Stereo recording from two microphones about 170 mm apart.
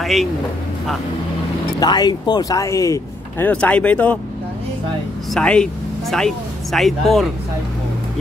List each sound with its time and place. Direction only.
0.0 s speech: centre (ahead or behind)
1.8 s speech: 25° left (ahead or behind)
5.3 s speech: 5° left (ahead or behind)